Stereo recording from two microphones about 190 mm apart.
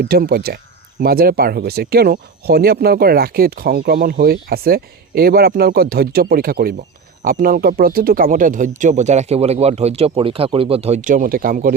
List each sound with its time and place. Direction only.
0.0 s speech: 55° right (ahead or behind)